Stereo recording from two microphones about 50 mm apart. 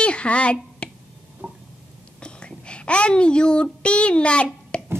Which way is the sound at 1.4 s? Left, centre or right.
Right.